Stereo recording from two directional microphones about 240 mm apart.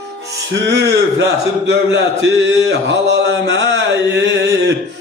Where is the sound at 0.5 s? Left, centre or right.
Right.